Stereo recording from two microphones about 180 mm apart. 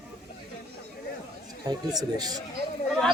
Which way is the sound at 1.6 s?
20° right (ahead or behind).